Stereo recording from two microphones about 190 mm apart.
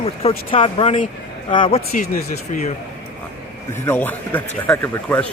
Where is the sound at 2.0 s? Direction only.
40° left (ahead or behind).